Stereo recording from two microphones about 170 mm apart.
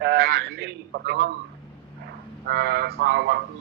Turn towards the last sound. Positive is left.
turn(degrees=-65)  # may be behind; listen again after turning